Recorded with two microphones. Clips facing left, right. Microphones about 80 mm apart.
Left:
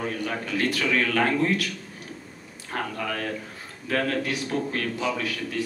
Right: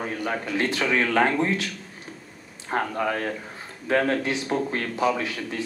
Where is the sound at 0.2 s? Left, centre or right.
Right.